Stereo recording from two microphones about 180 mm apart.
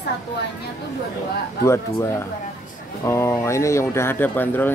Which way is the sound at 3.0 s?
15° left (ahead or behind).